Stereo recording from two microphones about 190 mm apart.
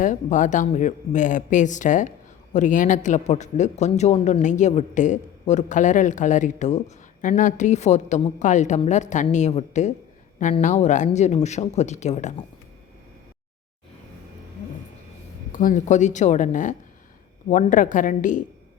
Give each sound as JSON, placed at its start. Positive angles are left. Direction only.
{"t": 0.0, "sound": "speech", "side_deg": 40}
{"t": 15.5, "sound": "a woman's voice", "side_deg": 45}